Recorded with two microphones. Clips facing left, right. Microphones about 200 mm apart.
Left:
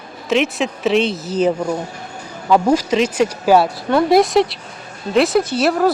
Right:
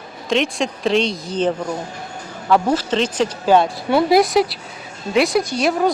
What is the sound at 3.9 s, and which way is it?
Speech, 5° right (ahead or behind).